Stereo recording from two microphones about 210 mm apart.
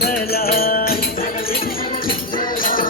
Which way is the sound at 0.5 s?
45° left (ahead or behind).